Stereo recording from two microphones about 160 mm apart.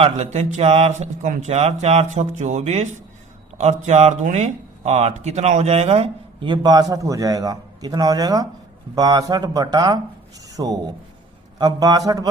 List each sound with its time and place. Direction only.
0.0 s a man's voice: 45° right (ahead or behind); by 12.3 s 25° right (ahead or behind)